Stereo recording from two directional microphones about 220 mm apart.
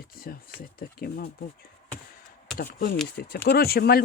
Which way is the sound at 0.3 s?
45° left (ahead or behind).